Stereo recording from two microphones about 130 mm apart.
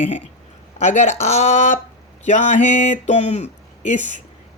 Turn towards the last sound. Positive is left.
turn(degrees=60)  # may be behind; listen again after turning